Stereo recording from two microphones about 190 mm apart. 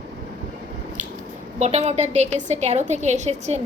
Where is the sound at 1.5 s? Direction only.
35° right (ahead or behind).